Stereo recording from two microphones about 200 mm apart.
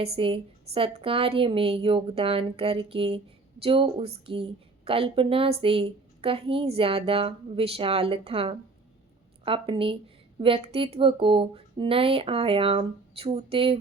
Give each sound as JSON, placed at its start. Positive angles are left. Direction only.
{"t": 0.0, "sound": "a woman's voice", "side_deg": -25}